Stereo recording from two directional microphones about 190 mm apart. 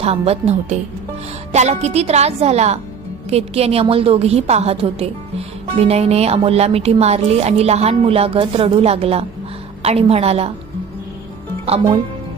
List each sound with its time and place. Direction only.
0.0 s a woman's voice: 30° right (ahead or behind)